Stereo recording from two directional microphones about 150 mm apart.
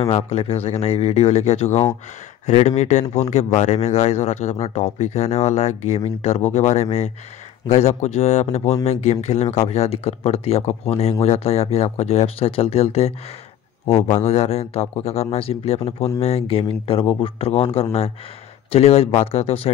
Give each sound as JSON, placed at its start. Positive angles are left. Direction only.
{"t": 0.0, "sound": "speech", "side_deg": 40}